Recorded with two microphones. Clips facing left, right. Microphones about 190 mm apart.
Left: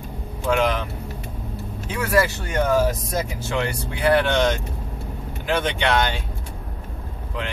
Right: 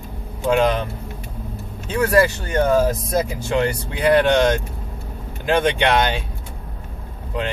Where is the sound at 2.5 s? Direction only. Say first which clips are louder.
Right 2 dB; 30° right (ahead or behind).